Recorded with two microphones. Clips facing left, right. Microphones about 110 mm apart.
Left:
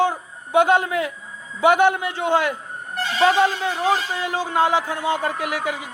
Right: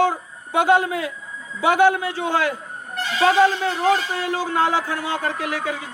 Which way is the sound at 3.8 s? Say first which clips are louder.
Right 2 dB; 20° left (ahead or behind).